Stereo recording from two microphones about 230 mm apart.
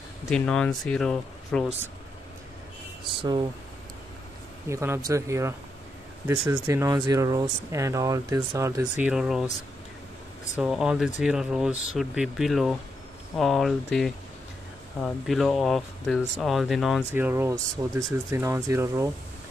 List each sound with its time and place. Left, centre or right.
0.3 s speech: centre
3.0 s speech: centre
4.6 s speech: centre
10.6 s speech: centre